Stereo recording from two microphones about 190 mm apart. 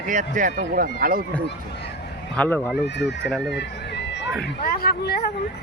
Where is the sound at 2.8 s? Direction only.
65° left (ahead or behind).